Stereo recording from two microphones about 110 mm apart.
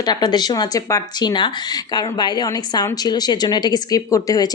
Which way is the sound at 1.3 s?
40° left (ahead or behind).